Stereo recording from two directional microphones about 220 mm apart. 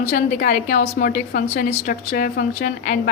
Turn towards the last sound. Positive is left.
turn(degrees=40)  # may be behind; listen again after turning